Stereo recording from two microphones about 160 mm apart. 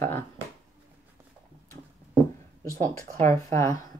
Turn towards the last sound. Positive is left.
turn(degrees=20)  # may be behind; listen again after turning